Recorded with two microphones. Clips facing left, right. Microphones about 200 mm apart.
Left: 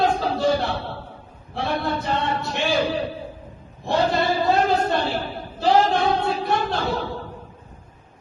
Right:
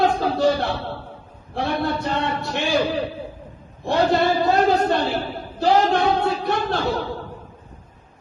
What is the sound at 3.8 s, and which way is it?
Speech, 55° right (ahead or behind).